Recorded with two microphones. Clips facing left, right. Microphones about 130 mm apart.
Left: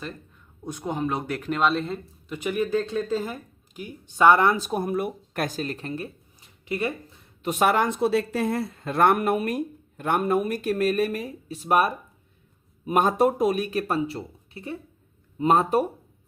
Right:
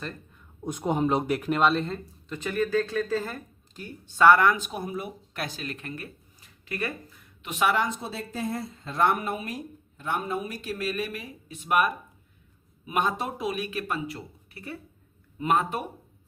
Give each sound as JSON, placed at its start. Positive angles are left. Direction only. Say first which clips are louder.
{"t": 0.6, "sound": "speech", "louder": "right 2 dB", "side_deg": -15}
{"t": 1.3, "sound": "speech", "louder": "right 1 dB", "side_deg": -5}
{"t": 7.4, "sound": "speech", "louder": "left 4 dB", "side_deg": 45}